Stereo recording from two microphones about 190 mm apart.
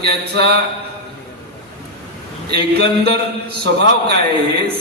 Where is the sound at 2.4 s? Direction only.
55° right (ahead or behind).